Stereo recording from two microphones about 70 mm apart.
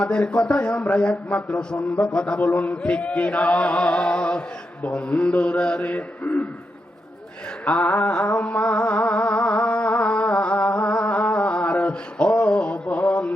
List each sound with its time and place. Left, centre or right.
0.0 s music: centre
2.5 s chant: left
7.6 s chant: left
8.3 s music: left
11.0 s a sound: centre